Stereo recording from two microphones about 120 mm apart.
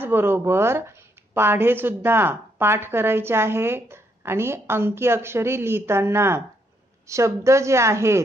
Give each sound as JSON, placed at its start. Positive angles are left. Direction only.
{"t": 0.0, "sound": "a woman's voice", "side_deg": -20}